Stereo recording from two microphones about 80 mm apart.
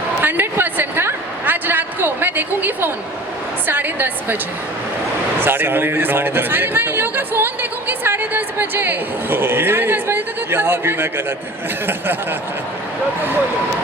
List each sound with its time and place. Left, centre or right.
0.2 s a sound: right
3.7 s speech: right
5.4 s speech: right